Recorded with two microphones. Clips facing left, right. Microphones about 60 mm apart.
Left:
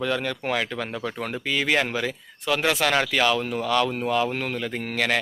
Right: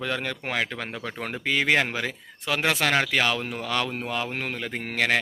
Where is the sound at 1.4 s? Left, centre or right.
Right.